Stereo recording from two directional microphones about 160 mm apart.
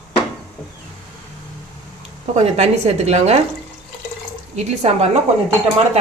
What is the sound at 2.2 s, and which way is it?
A woman's voice, 45° right (ahead or behind).